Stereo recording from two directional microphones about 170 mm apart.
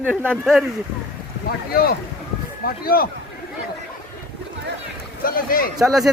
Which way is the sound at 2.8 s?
60° left (ahead or behind).